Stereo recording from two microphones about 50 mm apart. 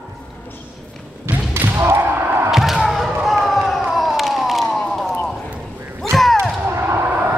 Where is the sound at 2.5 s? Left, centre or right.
Centre.